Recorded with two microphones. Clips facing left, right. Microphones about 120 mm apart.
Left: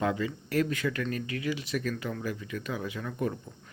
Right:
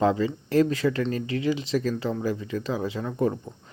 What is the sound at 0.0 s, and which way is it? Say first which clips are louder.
Speech: right 7 dB; 30° right (ahead or behind).